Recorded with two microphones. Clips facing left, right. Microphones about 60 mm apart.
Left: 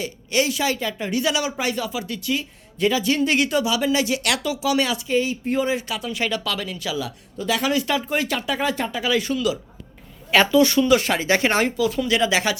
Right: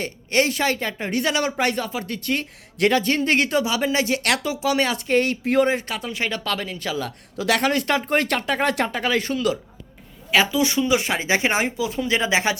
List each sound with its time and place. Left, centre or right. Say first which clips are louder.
0.0 s speech: right 1 dB; right
2.7 s speech: right 2 dB; right
3.0 s speech: even; right
4.9 s speech: right 2 dB; right
5.6 s speech: right 1 dB; right
7.3 s speech: right 3 dB; right
7.6 s speech: right 1 dB; right
10.3 s speech: left 3 dB; centre; by 12.5 s right